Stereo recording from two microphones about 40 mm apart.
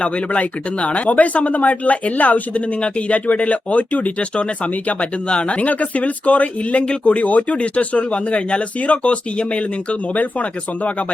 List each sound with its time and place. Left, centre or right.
0.0 s speech: left